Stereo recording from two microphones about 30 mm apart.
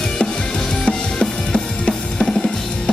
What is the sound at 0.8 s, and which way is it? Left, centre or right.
Drum kit, left.